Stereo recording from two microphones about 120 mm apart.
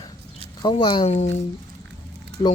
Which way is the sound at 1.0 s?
70° left (ahead or behind).